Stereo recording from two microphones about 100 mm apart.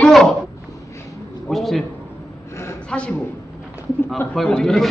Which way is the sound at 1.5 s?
Centre (ahead or behind).